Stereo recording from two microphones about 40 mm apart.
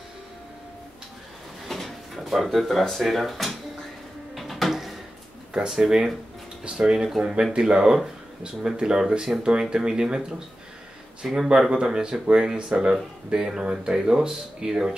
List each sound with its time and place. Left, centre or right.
1.7 s speech: centre
4.4 s a sound: centre
5.8 s speech: centre
11.3 s speech: right